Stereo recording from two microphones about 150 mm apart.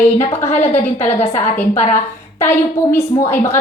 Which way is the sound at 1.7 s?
50° left (ahead or behind).